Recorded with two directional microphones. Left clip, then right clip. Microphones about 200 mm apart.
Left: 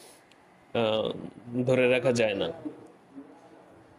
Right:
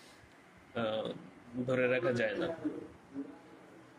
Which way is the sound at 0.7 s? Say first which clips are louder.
Left 9 dB; 35° left (ahead or behind).